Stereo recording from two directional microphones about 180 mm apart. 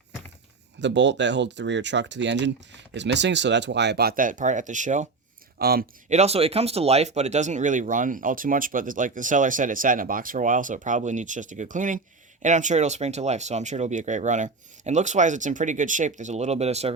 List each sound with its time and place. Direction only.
0.8 s speech: 80° right; by 5.0 s 45° right (ahead or behind)
5.5 s speech: 60° right (ahead or behind)
6.1 s speech: 35° right (ahead or behind)